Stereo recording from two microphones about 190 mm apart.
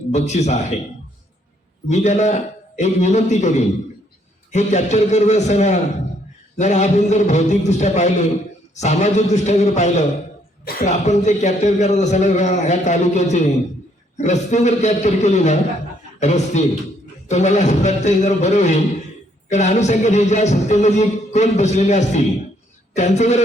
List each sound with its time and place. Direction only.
0.1 s speech: 35° left (ahead or behind)
1.9 s speech: 35° left (ahead or behind)